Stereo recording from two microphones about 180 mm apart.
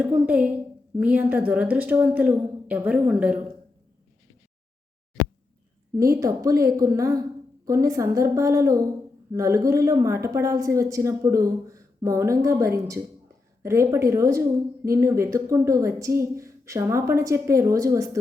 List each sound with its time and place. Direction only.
0.3 s a woman's voice: 5° right (ahead or behind)
6.0 s a woman's voice: 15° right (ahead or behind)